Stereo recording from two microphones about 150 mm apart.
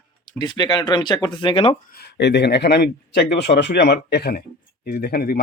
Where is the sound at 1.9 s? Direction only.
90° left.